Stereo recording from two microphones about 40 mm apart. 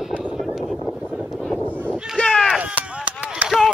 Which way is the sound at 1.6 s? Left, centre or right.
Right.